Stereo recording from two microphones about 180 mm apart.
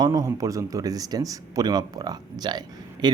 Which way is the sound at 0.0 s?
20° right (ahead or behind).